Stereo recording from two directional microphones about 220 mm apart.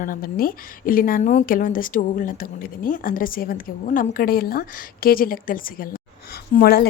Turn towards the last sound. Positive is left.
turn(degrees=45)  # may be behind; listen again after turning